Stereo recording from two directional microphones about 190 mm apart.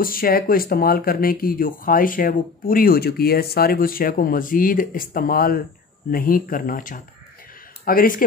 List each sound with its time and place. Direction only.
0.0 s a man's voice: 50° left (ahead or behind)